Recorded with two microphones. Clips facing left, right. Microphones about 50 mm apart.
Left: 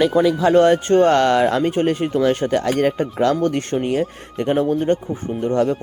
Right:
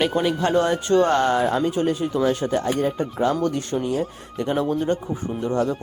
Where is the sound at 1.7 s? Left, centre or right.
Left.